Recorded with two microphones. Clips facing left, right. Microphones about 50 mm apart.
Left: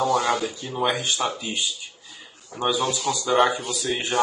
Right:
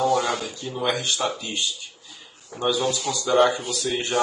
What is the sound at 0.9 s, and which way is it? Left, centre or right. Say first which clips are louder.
Speech: even; left.